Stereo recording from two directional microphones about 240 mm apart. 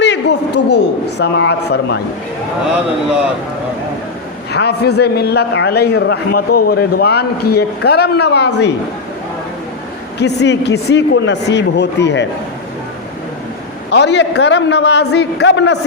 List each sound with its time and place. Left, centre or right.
0.0 s a man's voice: left
4.5 s a man's voice: left
10.2 s a man's voice: left
13.9 s a man's voice: left